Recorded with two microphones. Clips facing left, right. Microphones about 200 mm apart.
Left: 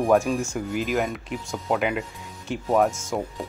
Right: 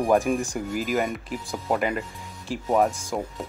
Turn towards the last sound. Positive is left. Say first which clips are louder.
# left 1 dB
turn(degrees=0)  # may be behind; listen again after turning